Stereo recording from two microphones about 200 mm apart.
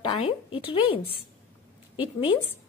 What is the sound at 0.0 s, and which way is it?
A woman's voice, 25° left (ahead or behind).